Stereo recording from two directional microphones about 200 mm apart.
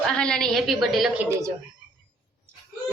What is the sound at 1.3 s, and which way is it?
Speech, 15° right (ahead or behind).